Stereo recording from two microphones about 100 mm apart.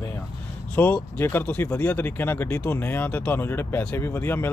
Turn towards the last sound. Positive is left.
turn(degrees=20)  # may be behind; listen again after turning